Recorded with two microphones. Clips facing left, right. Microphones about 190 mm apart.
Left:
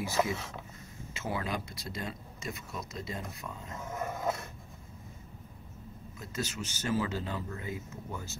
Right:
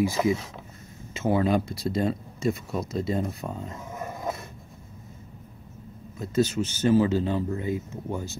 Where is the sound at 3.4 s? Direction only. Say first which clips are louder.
Right 9 dB; 45° right (ahead or behind).